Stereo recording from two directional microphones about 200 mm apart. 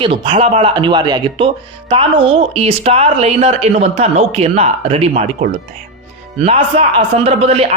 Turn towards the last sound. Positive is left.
turn(degrees=-30)  # may be behind; listen again after turning